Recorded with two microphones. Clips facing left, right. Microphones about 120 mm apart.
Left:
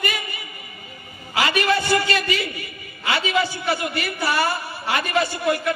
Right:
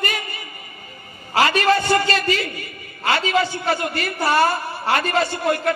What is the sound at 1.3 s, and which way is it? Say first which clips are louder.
A man's voice: right 3 dB; 40° right (ahead or behind).